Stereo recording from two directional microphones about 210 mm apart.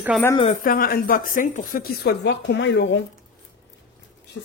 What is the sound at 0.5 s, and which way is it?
A woman's voice, 40° left (ahead or behind).